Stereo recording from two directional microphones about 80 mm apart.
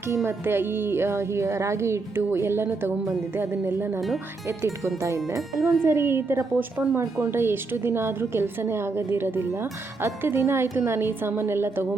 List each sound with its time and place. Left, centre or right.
0.3 s a woman's voice: right